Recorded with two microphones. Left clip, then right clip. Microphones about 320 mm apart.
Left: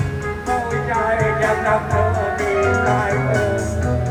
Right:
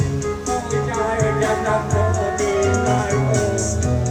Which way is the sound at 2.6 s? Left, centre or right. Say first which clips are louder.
Left 4 dB; centre.